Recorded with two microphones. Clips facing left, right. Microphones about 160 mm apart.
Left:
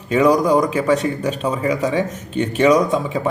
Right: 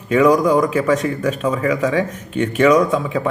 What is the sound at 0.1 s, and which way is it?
Speech, 35° left (ahead or behind).